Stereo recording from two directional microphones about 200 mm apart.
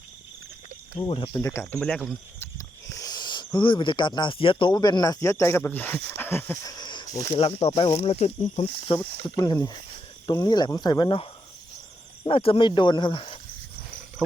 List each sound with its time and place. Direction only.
0.9 s speech: 25° left (ahead or behind)
1.8 s speech: 5° left (ahead or behind)
2.6 s speech: 15° left (ahead or behind)
6.1 s a sound: 10° left (ahead or behind)
7.3 s speech: 30° left (ahead or behind)